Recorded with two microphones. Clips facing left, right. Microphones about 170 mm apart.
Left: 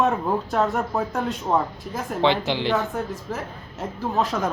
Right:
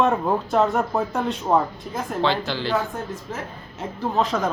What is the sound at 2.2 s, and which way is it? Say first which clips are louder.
Speech: left 3 dB; 20° left (ahead or behind).